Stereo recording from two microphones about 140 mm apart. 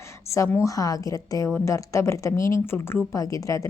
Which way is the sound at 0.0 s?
20° left (ahead or behind).